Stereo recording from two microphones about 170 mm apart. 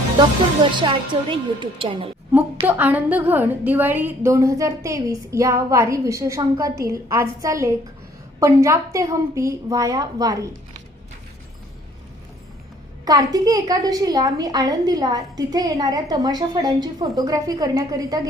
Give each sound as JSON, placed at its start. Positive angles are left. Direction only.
{"t": 0.8, "sound": "a woman's voice", "side_deg": -30}
{"t": 2.6, "sound": "a woman's voice", "side_deg": -10}
{"t": 13.1, "sound": "a woman's voice", "side_deg": -20}